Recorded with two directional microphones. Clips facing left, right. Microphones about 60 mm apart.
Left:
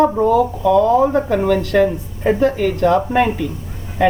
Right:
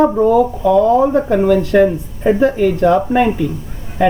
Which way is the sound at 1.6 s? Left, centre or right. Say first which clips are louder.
Right 3 dB; centre.